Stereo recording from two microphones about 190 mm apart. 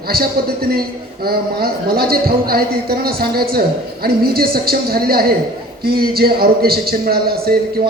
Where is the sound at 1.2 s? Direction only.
55° right (ahead or behind).